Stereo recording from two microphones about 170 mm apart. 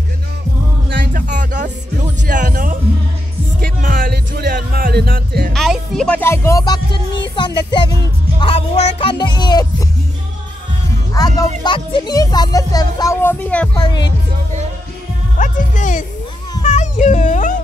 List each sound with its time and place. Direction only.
1.1 s music: 50° right (ahead or behind)
5.5 s music: centre (ahead or behind); by 9.8 s 25° left (ahead or behind)
11.1 s speech: 20° left (ahead or behind)
13.7 s speech: 25° left (ahead or behind)
15.3 s music: 50° left (ahead or behind)
16.6 s a sound: 45° left (ahead or behind)